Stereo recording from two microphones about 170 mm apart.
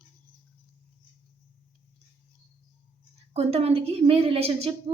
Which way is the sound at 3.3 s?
35° right (ahead or behind).